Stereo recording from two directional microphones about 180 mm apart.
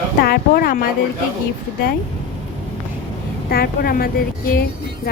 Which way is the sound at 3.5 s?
55° left (ahead or behind).